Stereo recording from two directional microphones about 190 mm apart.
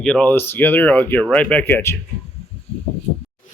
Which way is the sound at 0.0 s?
5° left (ahead or behind).